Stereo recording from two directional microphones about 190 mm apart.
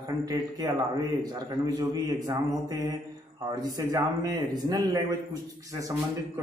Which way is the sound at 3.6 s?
20° right (ahead or behind).